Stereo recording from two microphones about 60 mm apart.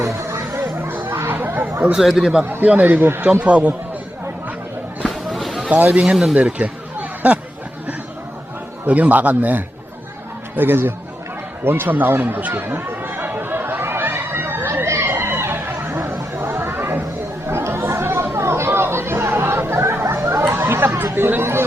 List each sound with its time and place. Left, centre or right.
0.0 s music: right
0.8 s a sound: right
1.3 s chatter: right
2.0 s speech: centre
2.4 s speech: right
3.4 s a man's voice: right
5.0 s a sound: centre
5.6 s a man's voice: right
6.3 s a sound: right
8.9 s a man's voice: right
12.5 s chatter: right
15.9 s chatter: right
16.4 s chatter: right